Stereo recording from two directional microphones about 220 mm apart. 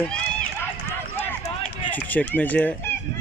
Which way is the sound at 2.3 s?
5° left (ahead or behind).